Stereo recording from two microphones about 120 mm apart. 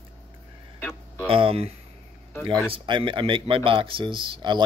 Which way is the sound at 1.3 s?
50° right (ahead or behind).